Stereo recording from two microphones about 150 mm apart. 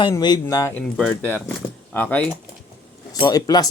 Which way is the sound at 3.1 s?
25° left (ahead or behind).